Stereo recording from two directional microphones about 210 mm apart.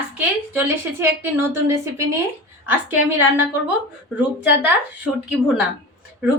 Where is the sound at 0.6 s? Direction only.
10° right (ahead or behind).